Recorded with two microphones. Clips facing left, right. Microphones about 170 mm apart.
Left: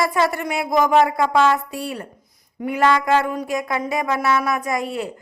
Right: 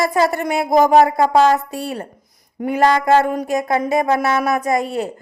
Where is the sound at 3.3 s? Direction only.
45° right (ahead or behind).